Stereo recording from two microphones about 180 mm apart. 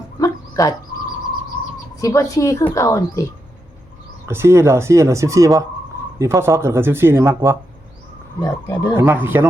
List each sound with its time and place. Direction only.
0.2 s dog: 20° left (ahead or behind)
2.0 s a woman's voice: 20° left (ahead or behind)
4.3 s speech: 15° right (ahead or behind)
8.4 s speech: 20° left (ahead or behind)
9.0 s speech: 10° right (ahead or behind)